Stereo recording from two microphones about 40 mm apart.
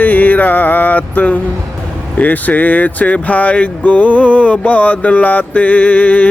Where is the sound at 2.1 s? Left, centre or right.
Left.